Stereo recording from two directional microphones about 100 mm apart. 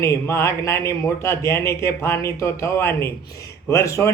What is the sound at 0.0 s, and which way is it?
A man's voice, 30° left (ahead or behind).